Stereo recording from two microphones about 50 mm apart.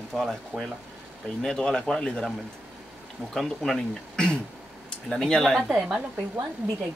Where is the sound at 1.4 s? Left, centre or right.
Centre.